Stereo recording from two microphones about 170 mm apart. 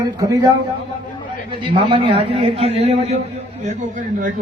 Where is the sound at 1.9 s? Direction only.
30° right (ahead or behind).